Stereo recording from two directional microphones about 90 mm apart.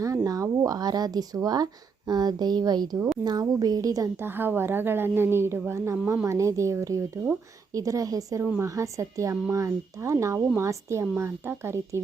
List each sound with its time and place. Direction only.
0.0 s a woman's voice: 40° right (ahead or behind)
4.2 s a woman's voice: 25° right (ahead or behind)